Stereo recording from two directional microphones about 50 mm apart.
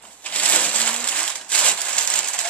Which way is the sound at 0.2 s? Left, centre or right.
Left.